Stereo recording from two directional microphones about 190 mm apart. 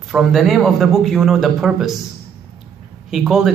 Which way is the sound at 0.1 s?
Centre (ahead or behind).